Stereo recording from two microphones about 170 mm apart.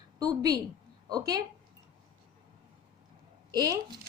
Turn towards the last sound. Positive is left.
turn(degrees=-25)  # may be behind; listen again after turning